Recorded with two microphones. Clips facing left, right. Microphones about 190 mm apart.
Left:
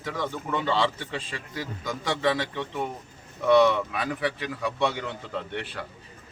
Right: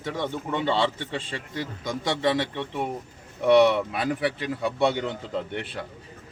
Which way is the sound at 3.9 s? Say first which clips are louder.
Right 3 dB; 30° right (ahead or behind).